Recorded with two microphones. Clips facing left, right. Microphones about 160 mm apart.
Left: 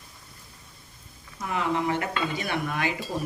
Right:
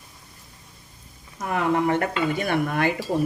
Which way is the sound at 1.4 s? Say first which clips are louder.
Right 5 dB; 55° right (ahead or behind).